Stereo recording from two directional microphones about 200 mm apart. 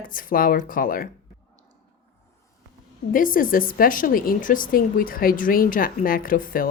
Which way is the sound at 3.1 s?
45° left (ahead or behind).